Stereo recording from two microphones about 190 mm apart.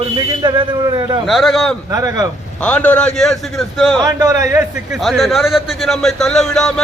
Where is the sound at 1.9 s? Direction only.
20° right (ahead or behind).